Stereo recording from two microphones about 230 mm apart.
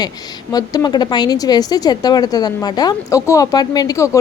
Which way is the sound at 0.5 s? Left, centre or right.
Centre.